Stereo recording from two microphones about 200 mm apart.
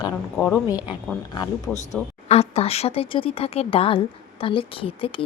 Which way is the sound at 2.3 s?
30° left (ahead or behind).